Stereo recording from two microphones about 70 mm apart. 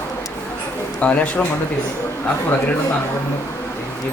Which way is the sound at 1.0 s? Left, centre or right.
Left.